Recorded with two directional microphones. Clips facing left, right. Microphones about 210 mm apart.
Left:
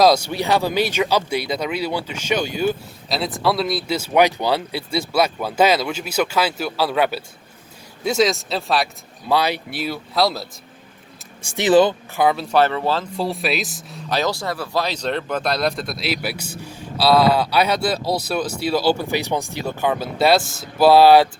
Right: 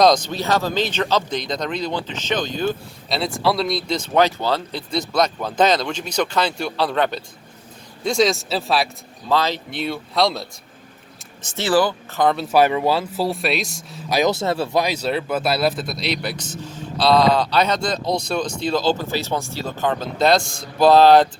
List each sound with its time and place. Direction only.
0.0 s speech: 10° left (ahead or behind)
9.3 s speech: 15° left (ahead or behind)
11.4 s speech: 15° left (ahead or behind)
12.2 s speech: 5° left (ahead or behind)
12.5 s speech: 10° right (ahead or behind)
14.1 s speech: 15° right (ahead or behind)
14.8 s speech: 10° right (ahead or behind); by 21.2 s 10° left (ahead or behind)